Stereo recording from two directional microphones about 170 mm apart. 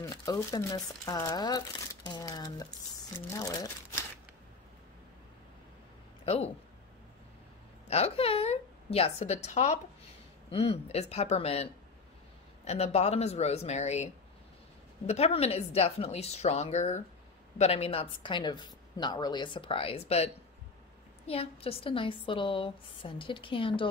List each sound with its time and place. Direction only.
0.0 s a woman's voice: 20° left (ahead or behind)
6.2 s speech: 35° left (ahead or behind)
7.9 s a woman's voice: 35° left (ahead or behind)
21.3 s a woman's voice: 35° left (ahead or behind)